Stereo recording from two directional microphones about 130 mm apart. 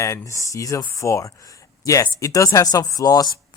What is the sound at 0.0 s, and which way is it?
Speech, 25° left (ahead or behind).